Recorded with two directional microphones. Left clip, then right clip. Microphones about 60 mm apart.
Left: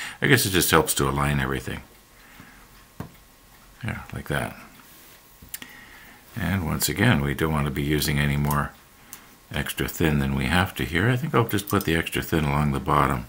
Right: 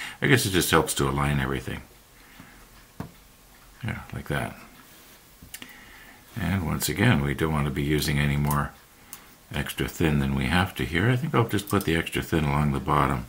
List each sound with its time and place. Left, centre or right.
0.0 s speech: left
3.8 s speech: left
6.3 s speech: left
9.5 s speech: left